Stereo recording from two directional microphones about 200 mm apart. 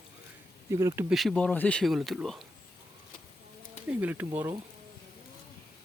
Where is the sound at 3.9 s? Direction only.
10° right (ahead or behind).